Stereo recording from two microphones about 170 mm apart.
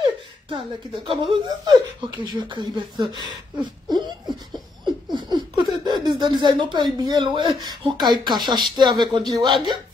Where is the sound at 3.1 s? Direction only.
25° right (ahead or behind).